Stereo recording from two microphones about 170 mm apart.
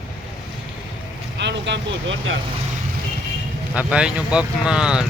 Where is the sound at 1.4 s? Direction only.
90° right.